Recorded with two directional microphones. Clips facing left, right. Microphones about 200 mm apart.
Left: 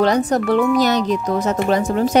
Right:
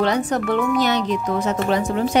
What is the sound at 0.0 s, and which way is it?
Speech, 40° left (ahead or behind).